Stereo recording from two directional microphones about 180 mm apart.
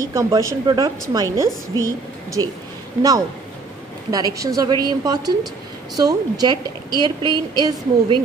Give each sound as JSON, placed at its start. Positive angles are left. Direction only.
{"t": 0.0, "sound": "a woman's voice", "side_deg": -15}
{"t": 4.1, "sound": "a woman's voice", "side_deg": -20}